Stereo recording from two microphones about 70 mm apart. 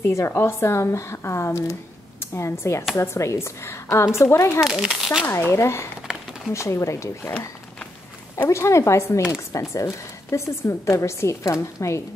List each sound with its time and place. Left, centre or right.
0.0 s a woman's voice: left
4.6 s speech: centre
5.5 s a woman's voice: left
8.5 s a woman's voice: left